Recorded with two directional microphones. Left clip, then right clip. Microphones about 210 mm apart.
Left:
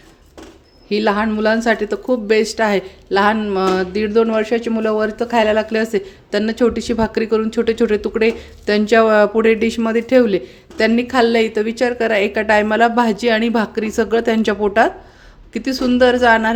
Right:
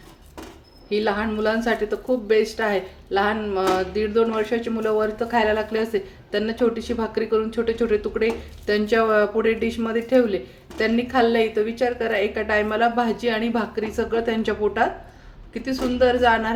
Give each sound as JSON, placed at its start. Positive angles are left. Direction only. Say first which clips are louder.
{"t": 0.9, "sound": "speech", "louder": "left 6 dB", "side_deg": 50}